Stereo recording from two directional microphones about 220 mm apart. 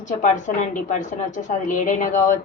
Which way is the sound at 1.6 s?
35° left (ahead or behind).